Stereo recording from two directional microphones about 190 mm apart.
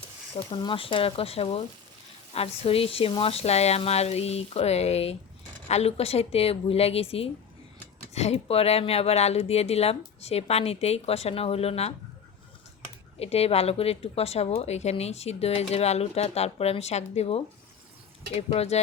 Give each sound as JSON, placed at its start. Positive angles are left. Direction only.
{"t": 0.5, "sound": "speech", "side_deg": 25}
{"t": 13.1, "sound": "speech", "side_deg": 35}